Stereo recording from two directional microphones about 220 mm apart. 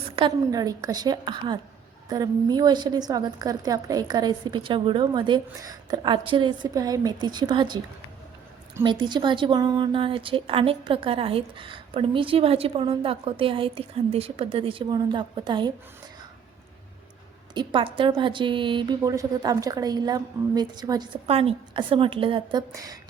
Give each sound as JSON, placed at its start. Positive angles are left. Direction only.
{"t": 0.2, "sound": "a woman's voice", "side_deg": -20}
{"t": 8.8, "sound": "a woman's voice", "side_deg": -20}
{"t": 17.5, "sound": "a woman's voice", "side_deg": -20}